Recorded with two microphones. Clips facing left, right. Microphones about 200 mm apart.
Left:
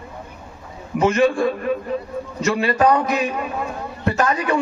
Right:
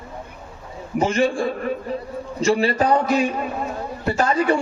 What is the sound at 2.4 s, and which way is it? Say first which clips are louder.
A man's voice: left 1 dB; 30° right (ahead or behind).